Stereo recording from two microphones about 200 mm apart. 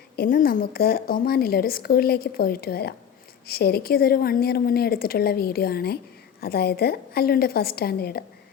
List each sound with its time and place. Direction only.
0.2 s a woman's voice: 45° left (ahead or behind)